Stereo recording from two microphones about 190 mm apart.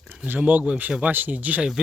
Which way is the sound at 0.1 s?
10° right (ahead or behind).